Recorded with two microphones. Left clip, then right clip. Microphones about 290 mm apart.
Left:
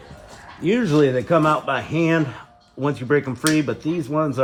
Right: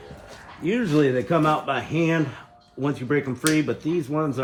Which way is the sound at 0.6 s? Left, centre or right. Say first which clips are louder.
Left 4 dB; left.